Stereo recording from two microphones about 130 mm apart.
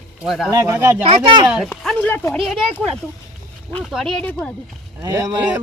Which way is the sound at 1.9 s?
15° left (ahead or behind).